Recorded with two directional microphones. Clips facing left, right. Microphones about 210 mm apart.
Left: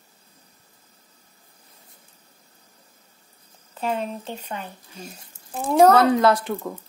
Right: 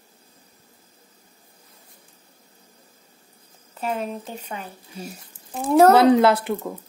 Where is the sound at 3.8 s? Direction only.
5° right (ahead or behind).